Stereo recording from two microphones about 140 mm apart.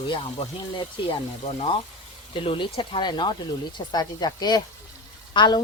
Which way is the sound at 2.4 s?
40° left (ahead or behind).